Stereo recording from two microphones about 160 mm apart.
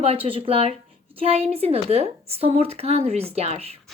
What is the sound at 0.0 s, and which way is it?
A woman's voice, 40° right (ahead or behind).